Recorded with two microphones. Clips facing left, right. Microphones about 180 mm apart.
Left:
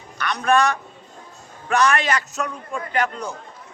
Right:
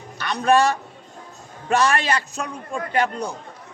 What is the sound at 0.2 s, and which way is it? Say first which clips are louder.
Speech: right 1 dB; 30° right (ahead or behind).